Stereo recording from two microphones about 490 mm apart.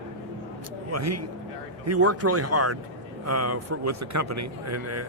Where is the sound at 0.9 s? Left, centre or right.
Right.